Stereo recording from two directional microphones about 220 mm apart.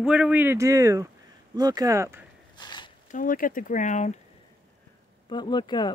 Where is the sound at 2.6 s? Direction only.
20° left (ahead or behind).